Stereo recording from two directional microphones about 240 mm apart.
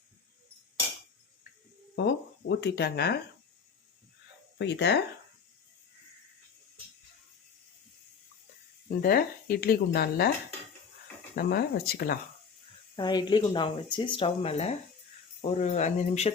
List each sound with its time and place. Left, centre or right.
2.5 s speech: left
4.5 s speech: left
9.0 s speech: left
11.3 s speech: left
13.0 s speech: centre